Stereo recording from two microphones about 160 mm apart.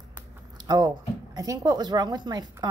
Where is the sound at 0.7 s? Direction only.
25° right (ahead or behind).